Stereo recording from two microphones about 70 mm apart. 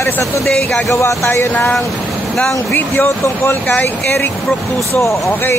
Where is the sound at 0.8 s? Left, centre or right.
Left.